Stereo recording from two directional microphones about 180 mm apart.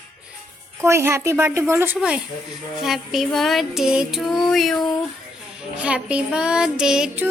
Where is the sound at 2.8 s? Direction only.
Centre (ahead or behind).